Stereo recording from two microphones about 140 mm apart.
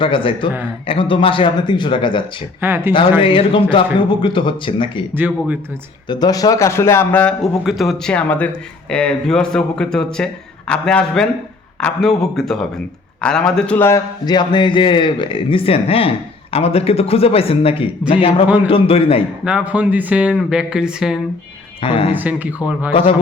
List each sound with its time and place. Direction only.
0.0 s a man's voice: 40° left (ahead or behind)
2.6 s speech: 15° right (ahead or behind)
3.2 s a man's voice: 40° left (ahead or behind)
5.1 s speech: 15° right (ahead or behind)
6.1 s speech: 30° left (ahead or behind); by 7.3 s 10° left (ahead or behind)
7.4 s a man's voice: centre (ahead or behind); by 14.0 s 15° left (ahead or behind)
14.3 s a man's voice: 30° left (ahead or behind)
18.4 s speech: 10° right (ahead or behind)
18.7 s a man's voice: 45° left (ahead or behind)
19.5 s speech: 10° right (ahead or behind)
21.8 s speech: 40° left (ahead or behind)
22.1 s speech: 10° right (ahead or behind)
22.9 s a man's voice: 40° left (ahead or behind)